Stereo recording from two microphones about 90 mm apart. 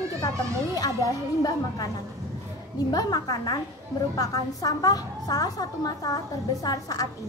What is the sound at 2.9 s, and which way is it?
A woman's voice, 45° left (ahead or behind).